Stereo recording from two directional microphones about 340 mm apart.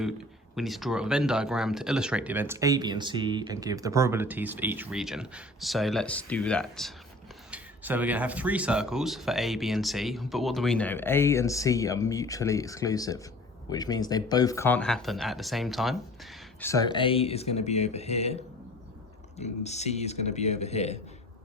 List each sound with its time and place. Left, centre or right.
0.5 s speech: centre
19.4 s speech: centre